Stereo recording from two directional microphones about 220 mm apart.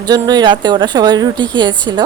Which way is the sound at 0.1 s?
20° right (ahead or behind).